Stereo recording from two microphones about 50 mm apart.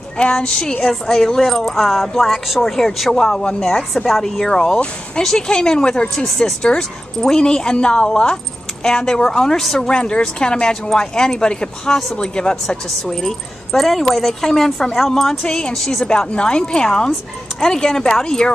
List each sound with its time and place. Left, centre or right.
0.2 s a woman's voice: centre
3.6 s a woman's voice: centre
9.8 s a woman's voice: centre
16.1 s a woman's voice: centre